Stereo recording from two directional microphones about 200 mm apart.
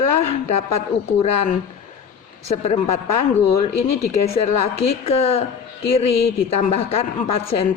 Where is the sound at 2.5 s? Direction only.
30° left (ahead or behind).